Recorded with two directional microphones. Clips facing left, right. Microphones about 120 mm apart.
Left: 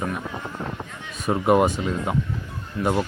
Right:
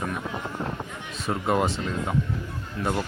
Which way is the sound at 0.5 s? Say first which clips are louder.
Even; centre (ahead or behind).